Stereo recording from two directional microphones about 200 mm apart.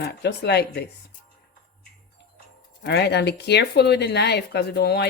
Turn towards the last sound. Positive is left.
turn(degrees=55)  # may be behind; listen again after turning